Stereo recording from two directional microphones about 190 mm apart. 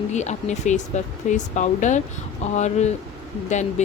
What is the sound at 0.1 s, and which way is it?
A woman's voice, 35° left (ahead or behind).